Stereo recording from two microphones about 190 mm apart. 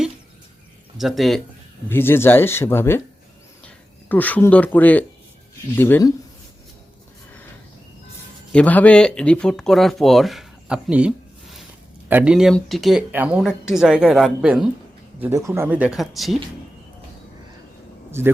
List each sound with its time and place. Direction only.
0.9 s speech: centre (ahead or behind)
1.9 s speech: 10° left (ahead or behind)
4.1 s speech: 10° left (ahead or behind)
8.5 s speech: 10° left (ahead or behind)
15.2 s speech: 15° right (ahead or behind)